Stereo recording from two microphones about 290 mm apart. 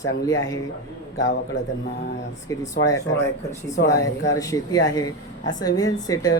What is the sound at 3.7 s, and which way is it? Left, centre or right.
Speech, left.